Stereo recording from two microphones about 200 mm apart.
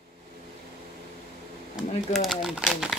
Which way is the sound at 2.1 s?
Centre (ahead or behind).